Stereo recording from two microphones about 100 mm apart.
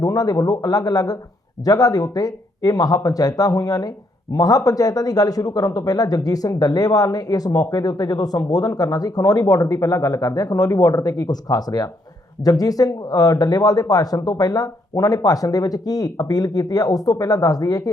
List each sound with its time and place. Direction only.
0.0 s speech: 40° left (ahead or behind)